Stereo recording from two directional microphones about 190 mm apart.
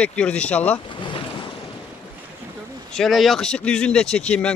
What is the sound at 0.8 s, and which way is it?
Boat, 25° left (ahead or behind).